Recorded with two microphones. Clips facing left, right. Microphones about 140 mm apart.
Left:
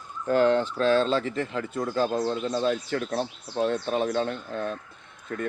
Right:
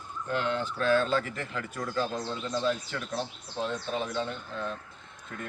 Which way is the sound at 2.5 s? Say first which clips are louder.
Left 1 dB; 40° left (ahead or behind).